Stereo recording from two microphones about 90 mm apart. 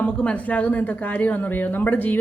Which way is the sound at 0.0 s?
15° left (ahead or behind).